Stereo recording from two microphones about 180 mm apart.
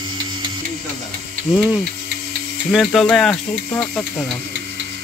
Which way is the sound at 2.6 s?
Centre (ahead or behind).